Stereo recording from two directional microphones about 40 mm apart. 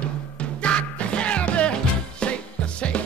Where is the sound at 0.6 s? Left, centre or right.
Left.